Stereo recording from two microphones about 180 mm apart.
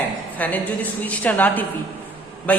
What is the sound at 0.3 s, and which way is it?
A woman's voice, 10° left (ahead or behind).